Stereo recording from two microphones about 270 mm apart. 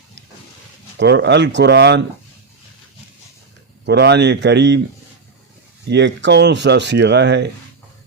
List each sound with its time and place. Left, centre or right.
0.9 s speech: right
3.8 s speech: right
5.9 s speech: right